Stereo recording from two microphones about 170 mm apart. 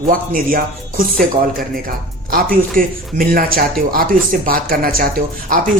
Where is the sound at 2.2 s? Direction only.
55° right (ahead or behind).